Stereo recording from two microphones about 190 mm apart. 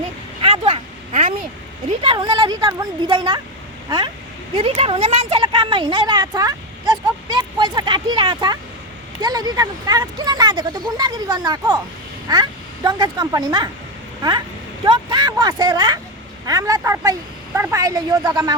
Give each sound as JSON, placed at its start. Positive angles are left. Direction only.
{"t": 0.4, "sound": "vehicle", "side_deg": -30}
{"t": 2.0, "sound": "a woman's voice", "side_deg": -25}